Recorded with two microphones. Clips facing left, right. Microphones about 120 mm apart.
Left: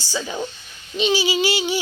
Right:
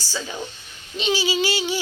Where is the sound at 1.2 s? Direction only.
20° left (ahead or behind).